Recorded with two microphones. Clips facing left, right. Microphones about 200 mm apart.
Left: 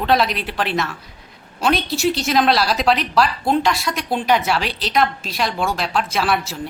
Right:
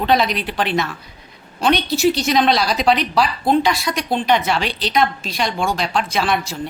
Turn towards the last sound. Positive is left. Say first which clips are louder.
# right 1 dB
turn(degrees=5)  # may be behind; listen again after turning